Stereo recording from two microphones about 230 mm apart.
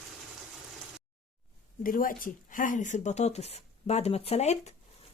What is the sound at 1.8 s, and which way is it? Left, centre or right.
Speech, left.